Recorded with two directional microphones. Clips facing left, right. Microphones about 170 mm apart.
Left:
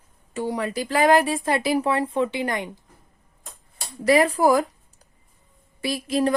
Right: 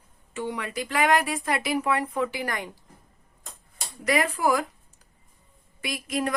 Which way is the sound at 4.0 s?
35° left (ahead or behind).